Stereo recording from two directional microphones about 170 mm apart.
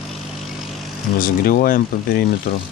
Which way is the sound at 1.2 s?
55° left (ahead or behind).